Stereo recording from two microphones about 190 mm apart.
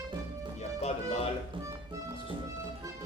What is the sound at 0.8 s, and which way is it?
Music, 35° left (ahead or behind).